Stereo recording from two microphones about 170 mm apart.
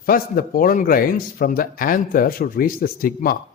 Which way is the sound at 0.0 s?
60° left (ahead or behind).